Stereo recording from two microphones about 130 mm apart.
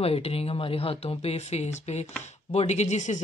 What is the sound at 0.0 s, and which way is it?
Speech, 50° left (ahead or behind).